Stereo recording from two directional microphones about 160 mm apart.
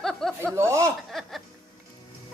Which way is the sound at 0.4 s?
15° right (ahead or behind).